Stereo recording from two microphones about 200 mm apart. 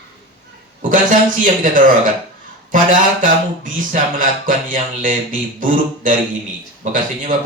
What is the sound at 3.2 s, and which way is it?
A man's voice, 40° right (ahead or behind).